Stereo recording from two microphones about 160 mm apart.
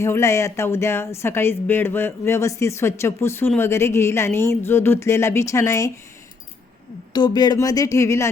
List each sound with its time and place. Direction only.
0.0 s speech: 15° left (ahead or behind)
7.1 s speech: 25° left (ahead or behind)